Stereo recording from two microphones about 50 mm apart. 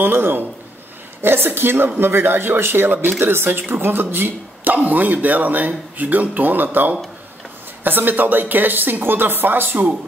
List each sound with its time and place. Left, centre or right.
0.0 s speech: right
2.9 s speech: right